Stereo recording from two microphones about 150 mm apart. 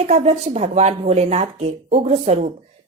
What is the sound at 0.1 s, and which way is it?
Speech, 45° right (ahead or behind).